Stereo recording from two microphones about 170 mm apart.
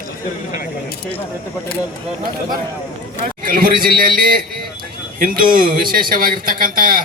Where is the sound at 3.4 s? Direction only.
60° right (ahead or behind).